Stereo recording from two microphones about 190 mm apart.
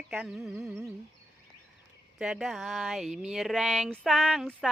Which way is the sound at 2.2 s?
5° right (ahead or behind).